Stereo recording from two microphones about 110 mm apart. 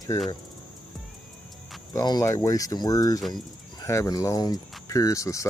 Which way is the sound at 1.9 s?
35° left (ahead or behind).